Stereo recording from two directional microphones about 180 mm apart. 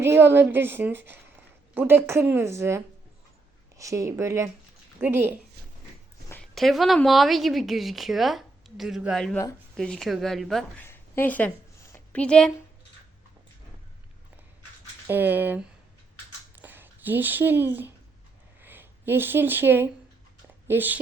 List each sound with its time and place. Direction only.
0.0 s a woman's voice: 15° right (ahead or behind)
6.2 s a woman's voice: 5° left (ahead or behind)
10.8 s a sound: 15° left (ahead or behind)
15.0 s a woman's voice: 10° right (ahead or behind)